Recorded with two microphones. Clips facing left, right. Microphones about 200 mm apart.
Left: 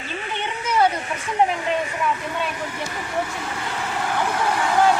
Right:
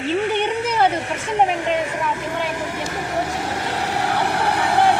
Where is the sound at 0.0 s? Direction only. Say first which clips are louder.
Right 10 dB; 65° right (ahead or behind).